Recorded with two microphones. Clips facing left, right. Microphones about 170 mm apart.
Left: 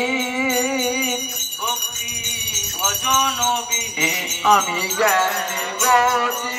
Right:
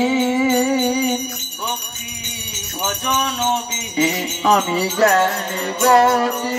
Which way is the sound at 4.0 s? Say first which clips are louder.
Right 8 dB; 35° right (ahead or behind).